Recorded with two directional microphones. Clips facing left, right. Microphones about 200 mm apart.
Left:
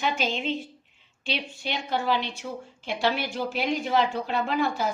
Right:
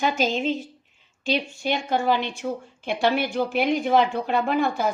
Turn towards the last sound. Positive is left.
turn(degrees=-55)  # may be behind; listen again after turning